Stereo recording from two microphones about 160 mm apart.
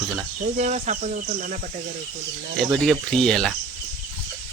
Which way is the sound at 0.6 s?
45° right (ahead or behind).